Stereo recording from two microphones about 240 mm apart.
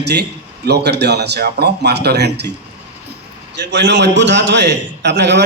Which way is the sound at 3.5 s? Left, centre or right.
Right.